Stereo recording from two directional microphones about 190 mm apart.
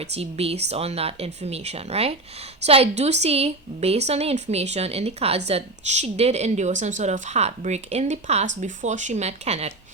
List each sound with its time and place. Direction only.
0.0 s a woman's voice: 35° right (ahead or behind)